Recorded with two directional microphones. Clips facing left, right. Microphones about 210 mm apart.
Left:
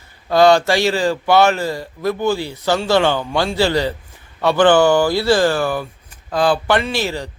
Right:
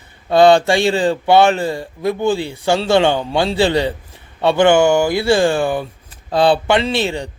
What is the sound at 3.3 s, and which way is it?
Speech, 30° right (ahead or behind).